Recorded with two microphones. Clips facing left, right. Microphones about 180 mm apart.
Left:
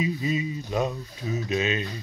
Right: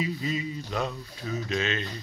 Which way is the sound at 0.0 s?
20° left (ahead or behind).